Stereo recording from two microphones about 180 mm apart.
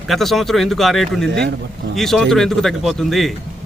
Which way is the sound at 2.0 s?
Centre (ahead or behind).